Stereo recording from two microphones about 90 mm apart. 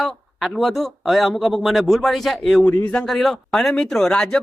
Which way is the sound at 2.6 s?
30° left (ahead or behind).